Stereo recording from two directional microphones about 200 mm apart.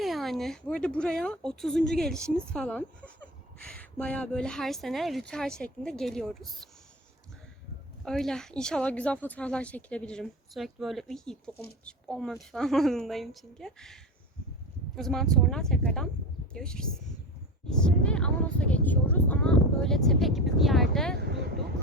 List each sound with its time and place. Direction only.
0.0 s speech: centre (ahead or behind)
8.0 s speech: centre (ahead or behind)
21.2 s vehicle: 55° right (ahead or behind)